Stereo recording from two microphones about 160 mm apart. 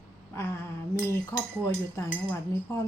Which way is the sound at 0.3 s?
15° left (ahead or behind).